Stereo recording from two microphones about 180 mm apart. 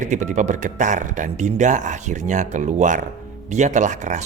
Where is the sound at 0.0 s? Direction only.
40° right (ahead or behind).